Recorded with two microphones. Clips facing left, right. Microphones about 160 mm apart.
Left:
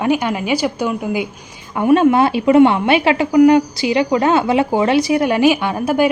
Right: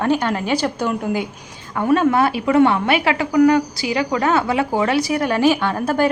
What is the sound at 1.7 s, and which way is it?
A woman's voice, 20° left (ahead or behind).